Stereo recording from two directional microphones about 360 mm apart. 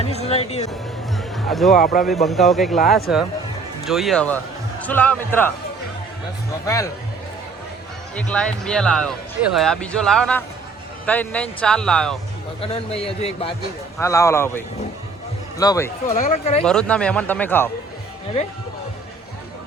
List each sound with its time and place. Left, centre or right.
0.0 s a man's voice: centre
1.5 s speech: centre
1.7 s speech: left
2.2 s speech: centre
8.1 s speech: centre
12.6 s a man's voice: centre
16.0 s speech: left
16.6 s speech: centre